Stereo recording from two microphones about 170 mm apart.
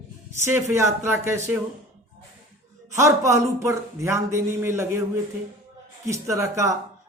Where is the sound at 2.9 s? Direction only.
15° right (ahead or behind).